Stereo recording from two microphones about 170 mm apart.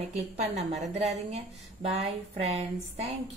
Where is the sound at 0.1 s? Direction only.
40° right (ahead or behind).